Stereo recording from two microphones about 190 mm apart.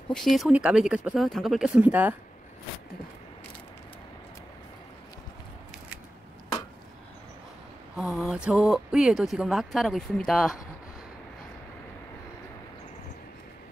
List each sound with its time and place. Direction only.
0.1 s speech: centre (ahead or behind)
7.9 s speech: centre (ahead or behind)